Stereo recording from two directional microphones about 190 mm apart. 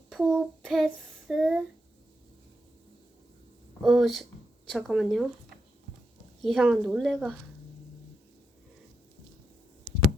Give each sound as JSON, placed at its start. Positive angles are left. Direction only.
{"t": 0.1, "sound": "child singing", "side_deg": 0}
{"t": 3.8, "sound": "speech", "side_deg": 0}
{"t": 6.4, "sound": "speech", "side_deg": 0}